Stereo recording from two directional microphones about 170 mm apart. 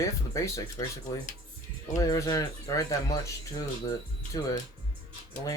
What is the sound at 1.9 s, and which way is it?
Speech, 20° left (ahead or behind).